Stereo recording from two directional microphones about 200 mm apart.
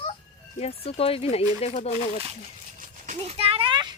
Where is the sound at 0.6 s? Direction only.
30° left (ahead or behind).